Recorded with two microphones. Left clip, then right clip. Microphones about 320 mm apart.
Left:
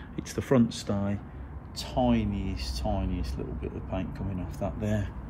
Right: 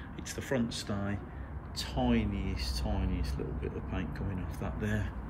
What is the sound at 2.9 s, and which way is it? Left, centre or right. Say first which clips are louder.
Speech: left 5 dB; centre.